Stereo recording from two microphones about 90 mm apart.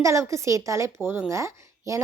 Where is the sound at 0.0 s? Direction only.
35° right (ahead or behind).